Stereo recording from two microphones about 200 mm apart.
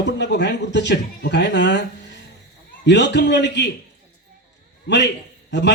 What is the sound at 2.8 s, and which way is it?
Speech, 60° left (ahead or behind).